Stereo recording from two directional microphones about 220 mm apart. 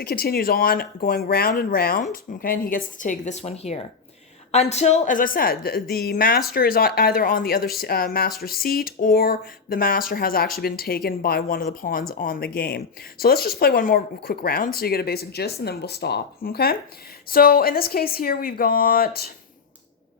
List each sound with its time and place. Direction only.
0.0 s speech: 45° left (ahead or behind)